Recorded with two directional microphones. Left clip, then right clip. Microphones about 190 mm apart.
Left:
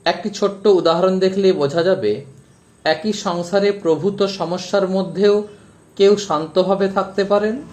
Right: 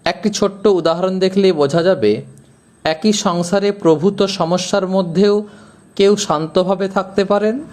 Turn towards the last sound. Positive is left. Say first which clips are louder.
# right 2 dB
turn(degrees=-25)  # may be behind; listen again after turning